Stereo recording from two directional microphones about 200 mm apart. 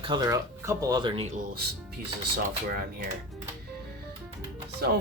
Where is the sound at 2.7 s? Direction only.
50° right (ahead or behind).